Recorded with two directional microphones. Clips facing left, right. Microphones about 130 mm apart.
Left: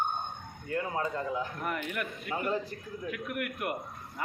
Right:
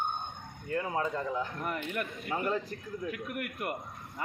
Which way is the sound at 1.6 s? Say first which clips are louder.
Even; 25° right (ahead or behind).